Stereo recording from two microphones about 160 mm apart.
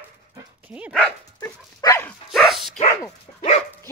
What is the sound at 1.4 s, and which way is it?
Dog, 20° left (ahead or behind).